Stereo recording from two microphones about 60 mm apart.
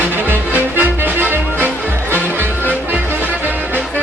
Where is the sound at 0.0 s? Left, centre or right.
Right.